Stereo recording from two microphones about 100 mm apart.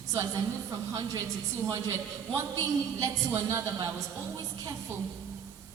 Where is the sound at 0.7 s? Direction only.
35° right (ahead or behind).